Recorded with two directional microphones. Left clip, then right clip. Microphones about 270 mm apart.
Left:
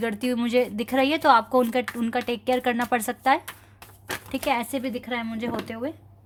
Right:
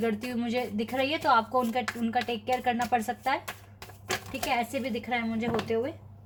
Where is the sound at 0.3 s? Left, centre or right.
Left.